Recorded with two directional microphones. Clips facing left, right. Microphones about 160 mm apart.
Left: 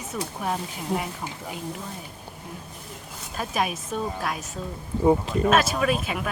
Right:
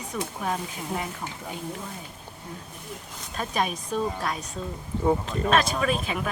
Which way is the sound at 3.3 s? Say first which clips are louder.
Left 1 dB; 5° left (ahead or behind).